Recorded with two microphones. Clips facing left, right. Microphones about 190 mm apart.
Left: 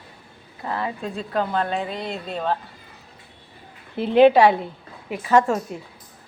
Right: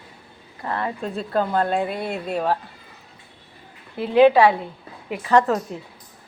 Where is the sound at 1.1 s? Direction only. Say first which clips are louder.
Right 3 dB; 5° right (ahead or behind).